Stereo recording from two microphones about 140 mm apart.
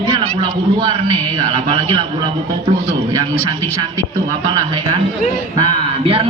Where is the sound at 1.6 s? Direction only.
35° right (ahead or behind).